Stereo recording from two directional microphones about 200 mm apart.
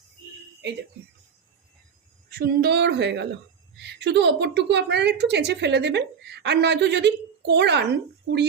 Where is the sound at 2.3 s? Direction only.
50° right (ahead or behind).